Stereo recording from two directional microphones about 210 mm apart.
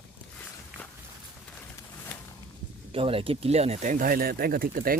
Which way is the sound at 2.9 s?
25° right (ahead or behind).